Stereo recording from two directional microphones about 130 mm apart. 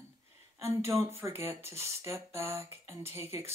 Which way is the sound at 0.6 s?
20° right (ahead or behind).